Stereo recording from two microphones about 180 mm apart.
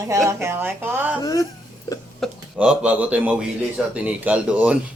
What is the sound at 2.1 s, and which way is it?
Speech, centre (ahead or behind).